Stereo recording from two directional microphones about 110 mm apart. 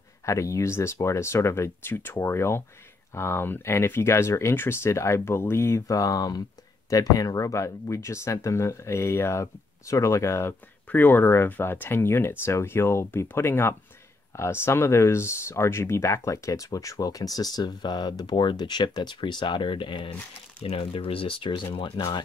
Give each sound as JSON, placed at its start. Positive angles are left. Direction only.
{"t": 0.2, "sound": "speech", "side_deg": 30}
{"t": 20.6, "sound": "speech", "side_deg": 60}